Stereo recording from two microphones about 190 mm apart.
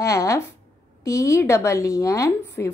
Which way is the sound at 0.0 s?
15° left (ahead or behind).